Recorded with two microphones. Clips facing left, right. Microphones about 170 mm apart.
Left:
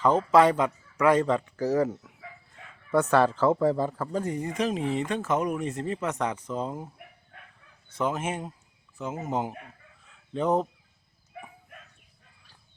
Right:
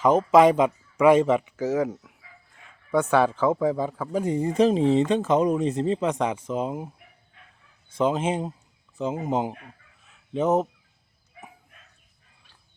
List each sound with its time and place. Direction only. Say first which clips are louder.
0.0 s speech: right 3 dB; 20° right (ahead or behind)
1.5 s speech: even; centre (ahead or behind)
4.2 s speech: right 9 dB; 25° right (ahead or behind)
7.3 s dog: left 5 dB; 65° left (ahead or behind)
7.9 s speech: right 6 dB; 20° right (ahead or behind)
10.1 s chicken: right 3 dB; 20° right (ahead or behind)